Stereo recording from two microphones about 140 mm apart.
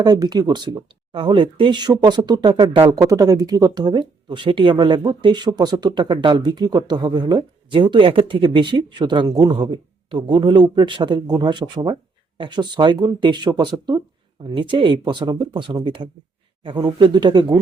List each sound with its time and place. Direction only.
0.0 s speech: 30° right (ahead or behind)